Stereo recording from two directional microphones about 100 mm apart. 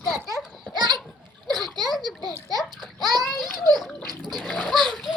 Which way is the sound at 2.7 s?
Centre (ahead or behind).